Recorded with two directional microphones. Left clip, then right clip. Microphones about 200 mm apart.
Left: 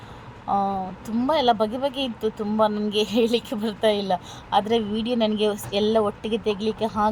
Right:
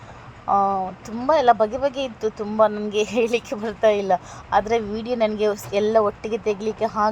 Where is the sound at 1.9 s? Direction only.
40° right (ahead or behind).